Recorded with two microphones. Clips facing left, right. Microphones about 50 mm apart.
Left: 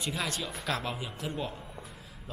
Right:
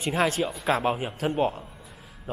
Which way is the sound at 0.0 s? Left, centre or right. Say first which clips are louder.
Right 10 dB; right.